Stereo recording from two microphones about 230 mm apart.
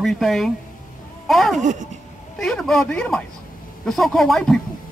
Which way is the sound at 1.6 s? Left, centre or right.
Right.